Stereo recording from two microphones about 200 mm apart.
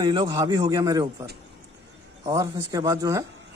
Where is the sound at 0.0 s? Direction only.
20° right (ahead or behind).